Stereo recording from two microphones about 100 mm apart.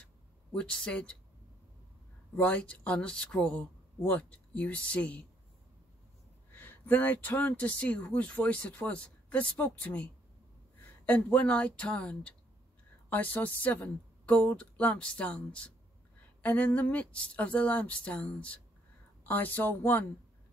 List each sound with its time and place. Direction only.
0.5 s speech: 10° left (ahead or behind)
2.3 s speech: 15° left (ahead or behind)
6.5 s speech: 20° left (ahead or behind)